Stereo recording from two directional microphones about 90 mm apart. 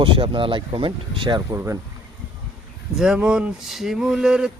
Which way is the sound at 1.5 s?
30° right (ahead or behind).